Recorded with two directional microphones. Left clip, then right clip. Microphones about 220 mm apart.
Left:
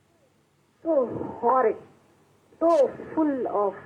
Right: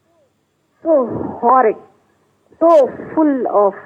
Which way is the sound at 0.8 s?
35° right (ahead or behind).